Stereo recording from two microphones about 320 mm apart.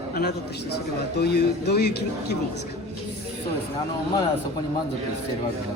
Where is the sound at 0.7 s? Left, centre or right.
Left.